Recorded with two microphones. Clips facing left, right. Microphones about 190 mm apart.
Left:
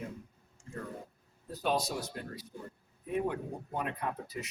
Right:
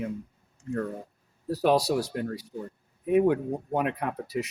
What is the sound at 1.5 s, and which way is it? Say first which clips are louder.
Speech: right 9 dB; 75° right (ahead or behind).